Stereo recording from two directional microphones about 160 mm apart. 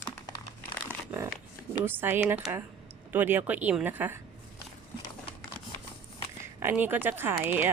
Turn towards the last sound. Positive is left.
turn(degrees=-10)  # may be behind; listen again after turning